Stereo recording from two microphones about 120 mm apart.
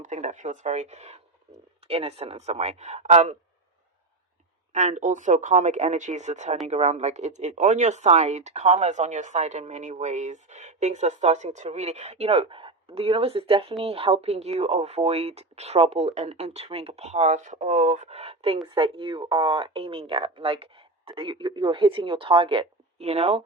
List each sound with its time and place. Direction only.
0.0 s speech: 80° right
4.7 s speech: 80° right
6.7 s speech: 65° right (ahead or behind)
18.7 s speech: 45° right (ahead or behind)